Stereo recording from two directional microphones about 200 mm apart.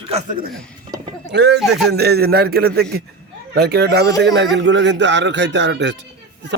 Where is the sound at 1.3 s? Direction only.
60° right (ahead or behind).